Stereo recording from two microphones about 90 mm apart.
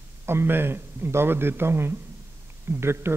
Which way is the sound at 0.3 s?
25° right (ahead or behind).